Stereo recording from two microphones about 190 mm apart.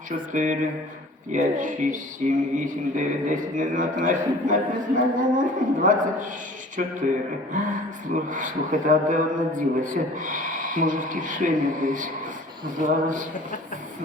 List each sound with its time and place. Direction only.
0.3 s speech: 40° right (ahead or behind)
7.5 s speech: 45° right (ahead or behind)